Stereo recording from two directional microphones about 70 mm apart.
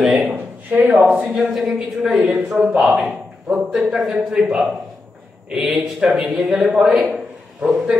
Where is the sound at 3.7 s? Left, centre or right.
Centre.